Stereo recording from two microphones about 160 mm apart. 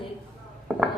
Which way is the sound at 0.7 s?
5° right (ahead or behind).